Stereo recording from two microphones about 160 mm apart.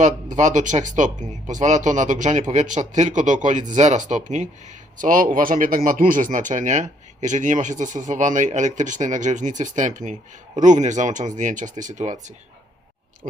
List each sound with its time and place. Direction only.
0.0 s speech: 50° right (ahead or behind)